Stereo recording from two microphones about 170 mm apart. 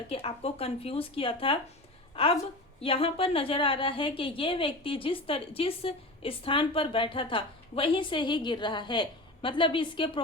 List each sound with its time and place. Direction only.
0.1 s a woman's voice: 35° left (ahead or behind)